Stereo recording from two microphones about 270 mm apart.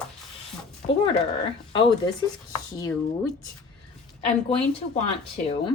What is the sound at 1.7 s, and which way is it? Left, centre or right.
Speech, centre.